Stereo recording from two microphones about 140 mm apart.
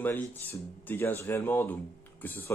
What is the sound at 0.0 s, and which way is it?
Speech, 15° left (ahead or behind).